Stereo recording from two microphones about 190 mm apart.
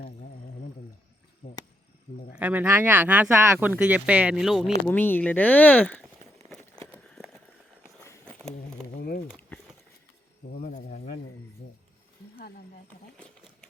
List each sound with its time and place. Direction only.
1.4 s insect: 45° left (ahead or behind)
2.3 s speech: 10° right (ahead or behind)
4.9 s speech: 10° left (ahead or behind)
8.5 s a sound: 50° left (ahead or behind)
10.5 s cricket: 45° left (ahead or behind)